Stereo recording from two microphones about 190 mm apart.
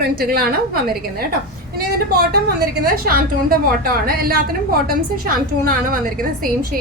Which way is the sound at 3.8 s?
50° right (ahead or behind).